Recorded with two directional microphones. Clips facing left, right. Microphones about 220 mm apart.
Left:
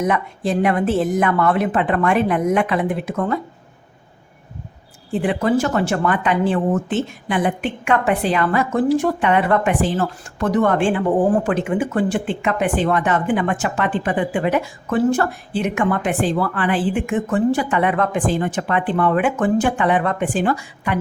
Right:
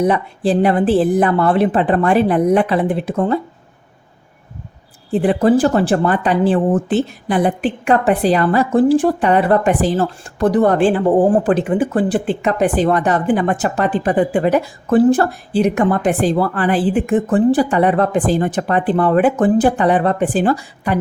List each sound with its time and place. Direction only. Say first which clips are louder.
0.0 s speech: right 4 dB; 35° right (ahead or behind)
5.1 s speech: right 5 dB; 35° right (ahead or behind)